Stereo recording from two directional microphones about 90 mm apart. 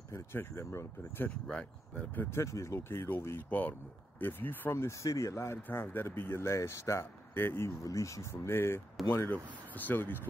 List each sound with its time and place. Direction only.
0.1 s speech: 30° left (ahead or behind)
1.5 s speech: 15° left (ahead or behind)
2.3 s speech: 35° left (ahead or behind)